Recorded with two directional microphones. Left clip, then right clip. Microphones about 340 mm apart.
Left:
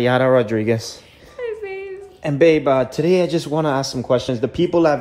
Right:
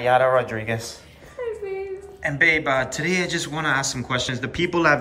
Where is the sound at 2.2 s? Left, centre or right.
Centre.